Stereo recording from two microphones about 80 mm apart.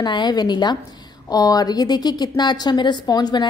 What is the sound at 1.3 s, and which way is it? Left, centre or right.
A woman's voice, left.